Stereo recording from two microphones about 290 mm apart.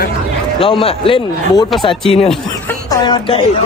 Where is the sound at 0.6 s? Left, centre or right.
Centre.